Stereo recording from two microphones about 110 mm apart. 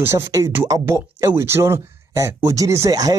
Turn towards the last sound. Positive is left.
turn(degrees=-35)  # may be behind; listen again after turning